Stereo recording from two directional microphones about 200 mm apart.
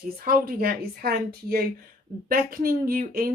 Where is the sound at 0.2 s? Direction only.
50° right (ahead or behind).